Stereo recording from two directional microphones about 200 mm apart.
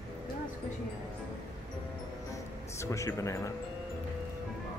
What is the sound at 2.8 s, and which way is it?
Speech, 15° left (ahead or behind).